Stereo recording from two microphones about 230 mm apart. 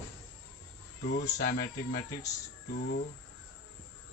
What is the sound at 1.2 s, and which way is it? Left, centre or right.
Speech, left.